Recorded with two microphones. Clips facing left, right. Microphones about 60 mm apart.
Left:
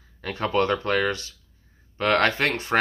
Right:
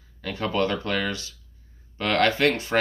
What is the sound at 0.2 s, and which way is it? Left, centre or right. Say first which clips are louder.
Speech: left 2 dB; left.